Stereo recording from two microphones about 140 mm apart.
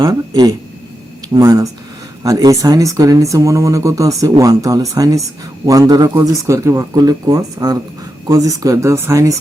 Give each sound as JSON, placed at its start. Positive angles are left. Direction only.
{"t": 0.0, "sound": "speech", "side_deg": -25}